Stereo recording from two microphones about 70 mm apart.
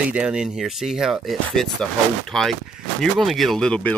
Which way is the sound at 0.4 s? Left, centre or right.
Centre.